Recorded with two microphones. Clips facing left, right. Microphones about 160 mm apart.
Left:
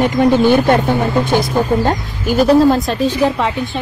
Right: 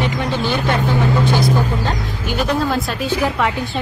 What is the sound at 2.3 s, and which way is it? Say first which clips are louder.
Speech: left 9 dB; 35° left (ahead or behind).